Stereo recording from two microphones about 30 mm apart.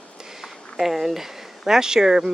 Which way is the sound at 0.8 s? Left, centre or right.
Centre.